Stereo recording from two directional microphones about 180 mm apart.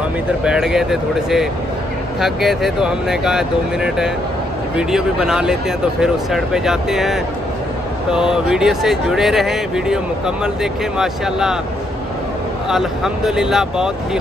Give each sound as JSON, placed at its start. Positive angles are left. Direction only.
{"t": 0.4, "sound": "speech", "side_deg": -5}
{"t": 12.6, "sound": "speech", "side_deg": 0}